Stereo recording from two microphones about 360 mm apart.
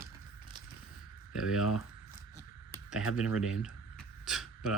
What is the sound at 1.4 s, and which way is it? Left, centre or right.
Speech, centre.